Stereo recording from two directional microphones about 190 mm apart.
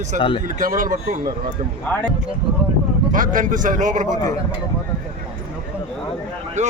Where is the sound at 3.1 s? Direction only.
45° right (ahead or behind).